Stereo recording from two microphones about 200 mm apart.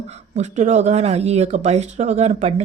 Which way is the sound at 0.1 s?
35° right (ahead or behind).